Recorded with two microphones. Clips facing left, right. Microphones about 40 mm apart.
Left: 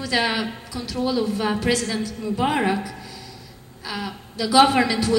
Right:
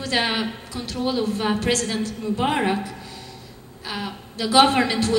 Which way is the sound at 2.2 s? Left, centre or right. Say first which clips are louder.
Left 1 dB; right.